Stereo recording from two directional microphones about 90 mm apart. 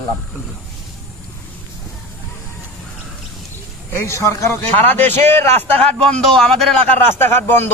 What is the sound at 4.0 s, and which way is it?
A man's voice, 30° left (ahead or behind).